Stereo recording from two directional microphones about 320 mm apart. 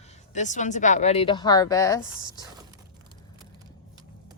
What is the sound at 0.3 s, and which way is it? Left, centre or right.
Speech, left.